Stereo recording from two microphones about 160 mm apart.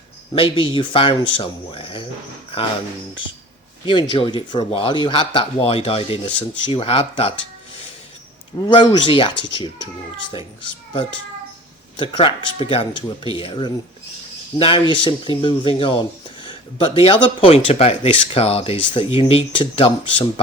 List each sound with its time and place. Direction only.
0.3 s speech: 30° left (ahead or behind)
3.8 s speech: 30° left (ahead or behind)
8.6 s speech: 25° left (ahead or behind)
11.9 s speech: 30° left (ahead or behind)